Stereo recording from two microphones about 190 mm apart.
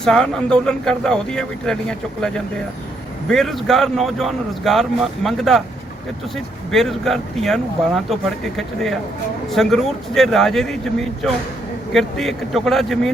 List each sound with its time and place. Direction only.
0.0 s speech: 5° left (ahead or behind)